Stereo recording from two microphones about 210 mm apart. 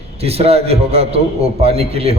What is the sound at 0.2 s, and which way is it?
A man's voice, 30° right (ahead or behind).